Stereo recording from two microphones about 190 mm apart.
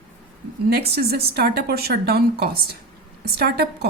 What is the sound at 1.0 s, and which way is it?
A woman's voice, 55° right (ahead or behind).